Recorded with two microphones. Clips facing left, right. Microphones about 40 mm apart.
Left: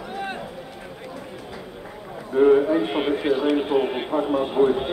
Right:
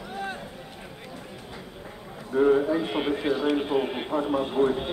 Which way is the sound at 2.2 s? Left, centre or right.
Left.